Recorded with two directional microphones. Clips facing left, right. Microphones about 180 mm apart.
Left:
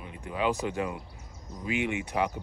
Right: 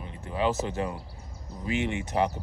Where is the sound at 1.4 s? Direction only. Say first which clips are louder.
Right 1 dB; 30° right (ahead or behind).